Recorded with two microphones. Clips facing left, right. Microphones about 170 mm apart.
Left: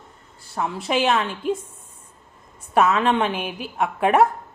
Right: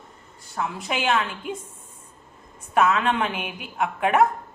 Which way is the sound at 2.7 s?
30° left (ahead or behind).